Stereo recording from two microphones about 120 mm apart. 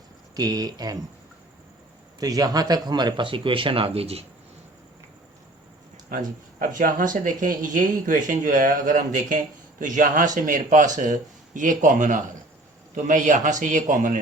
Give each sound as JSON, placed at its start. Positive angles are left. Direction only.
{"t": 0.3, "sound": "speech", "side_deg": -35}
{"t": 2.1, "sound": "speech", "side_deg": -30}
{"t": 6.7, "sound": "speech", "side_deg": -90}